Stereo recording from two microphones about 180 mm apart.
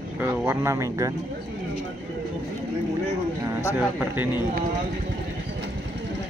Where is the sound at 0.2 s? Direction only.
15° right (ahead or behind).